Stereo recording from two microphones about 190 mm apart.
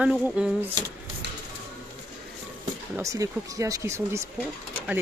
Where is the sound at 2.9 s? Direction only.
15° right (ahead or behind).